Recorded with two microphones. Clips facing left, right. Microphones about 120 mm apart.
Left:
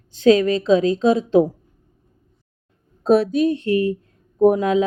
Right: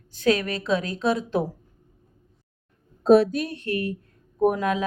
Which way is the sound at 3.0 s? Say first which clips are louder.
Even; centre (ahead or behind).